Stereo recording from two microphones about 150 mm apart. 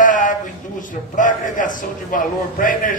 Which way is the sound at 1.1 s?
60° left (ahead or behind).